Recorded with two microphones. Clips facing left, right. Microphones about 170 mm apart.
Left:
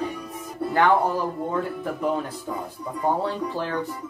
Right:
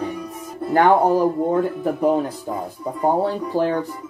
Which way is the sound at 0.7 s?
40° right (ahead or behind).